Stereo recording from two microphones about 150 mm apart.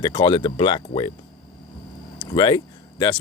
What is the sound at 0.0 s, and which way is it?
Speech, 30° left (ahead or behind).